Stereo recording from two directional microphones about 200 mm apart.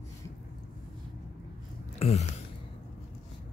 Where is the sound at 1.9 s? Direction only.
30° left (ahead or behind).